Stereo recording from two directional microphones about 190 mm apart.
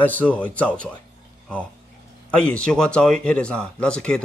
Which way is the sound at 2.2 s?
5° left (ahead or behind).